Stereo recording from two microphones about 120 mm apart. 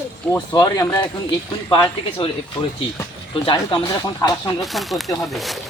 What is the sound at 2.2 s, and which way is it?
Speech, 50° left (ahead or behind).